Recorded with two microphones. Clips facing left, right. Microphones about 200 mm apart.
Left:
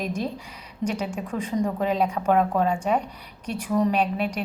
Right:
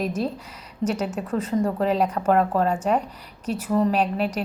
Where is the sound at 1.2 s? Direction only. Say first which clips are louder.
Right 2 dB; 10° left (ahead or behind).